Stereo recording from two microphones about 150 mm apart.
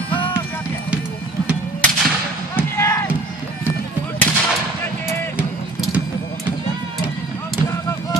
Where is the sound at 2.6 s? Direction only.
20° left (ahead or behind).